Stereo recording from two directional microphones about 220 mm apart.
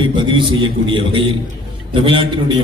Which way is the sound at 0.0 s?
20° right (ahead or behind).